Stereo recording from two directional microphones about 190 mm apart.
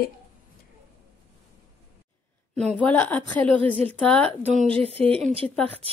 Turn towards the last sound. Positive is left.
turn(degrees=-30)  # may be behind; listen again after turning